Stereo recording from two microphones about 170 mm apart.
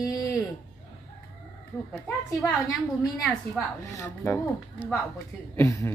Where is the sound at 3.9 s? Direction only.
15° left (ahead or behind).